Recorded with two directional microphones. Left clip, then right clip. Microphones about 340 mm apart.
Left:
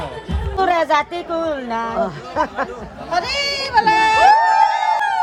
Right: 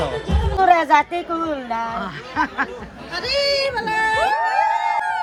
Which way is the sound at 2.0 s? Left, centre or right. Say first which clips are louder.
Left 3 dB; centre.